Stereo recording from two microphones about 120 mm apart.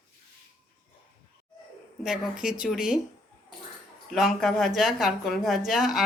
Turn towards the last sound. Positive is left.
turn(degrees=0)  # may be behind; listen again after turning